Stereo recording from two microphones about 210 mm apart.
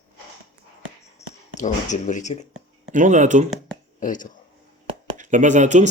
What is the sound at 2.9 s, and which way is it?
Speech, 35° right (ahead or behind).